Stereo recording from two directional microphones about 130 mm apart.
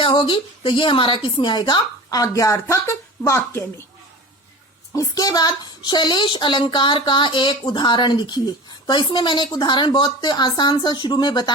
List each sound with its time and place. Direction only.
0.0 s speech: 40° left (ahead or behind); by 3.8 s 20° left (ahead or behind)
4.9 s speech: 25° left (ahead or behind)